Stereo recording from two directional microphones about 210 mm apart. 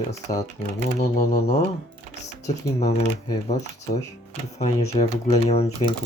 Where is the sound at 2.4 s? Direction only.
30° left (ahead or behind).